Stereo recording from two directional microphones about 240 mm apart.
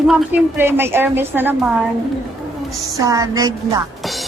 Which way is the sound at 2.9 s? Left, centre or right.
Centre.